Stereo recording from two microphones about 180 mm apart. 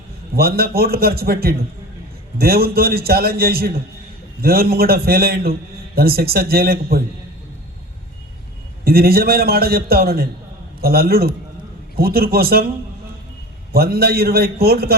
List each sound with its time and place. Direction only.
0.3 s a man's voice: 60° right (ahead or behind)
8.8 s a man's voice: 60° right (ahead or behind)
13.7 s a man's voice: 60° right (ahead or behind)